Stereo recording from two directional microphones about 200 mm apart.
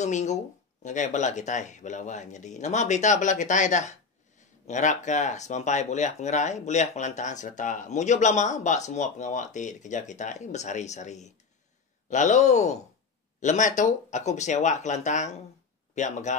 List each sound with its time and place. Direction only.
0.0 s speech: 35° left (ahead or behind)